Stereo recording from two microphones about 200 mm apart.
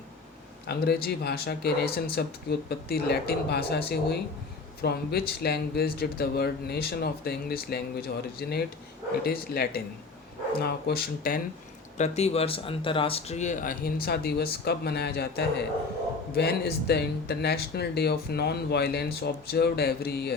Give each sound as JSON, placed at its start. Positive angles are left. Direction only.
{"t": 0.7, "sound": "speech", "side_deg": 50}
{"t": 11.9, "sound": "speech", "side_deg": 35}